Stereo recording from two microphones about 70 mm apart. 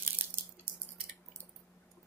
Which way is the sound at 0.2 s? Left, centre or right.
Right.